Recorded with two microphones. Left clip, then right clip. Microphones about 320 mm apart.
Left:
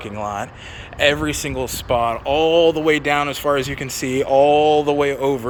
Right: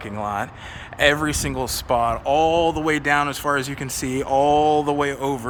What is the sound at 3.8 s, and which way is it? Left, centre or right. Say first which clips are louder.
Speech: left 4 dB; right.